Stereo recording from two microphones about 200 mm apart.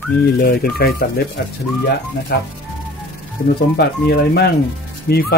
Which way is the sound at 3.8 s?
55° left (ahead or behind).